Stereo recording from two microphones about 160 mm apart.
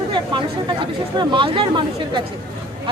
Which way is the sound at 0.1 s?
30° right (ahead or behind).